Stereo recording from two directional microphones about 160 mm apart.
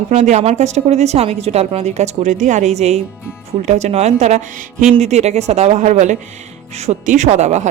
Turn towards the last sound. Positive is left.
turn(degrees=-45)  # may be behind; listen again after turning